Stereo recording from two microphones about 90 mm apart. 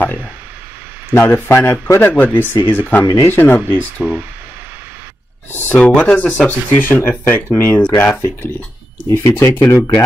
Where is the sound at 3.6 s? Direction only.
20° right (ahead or behind).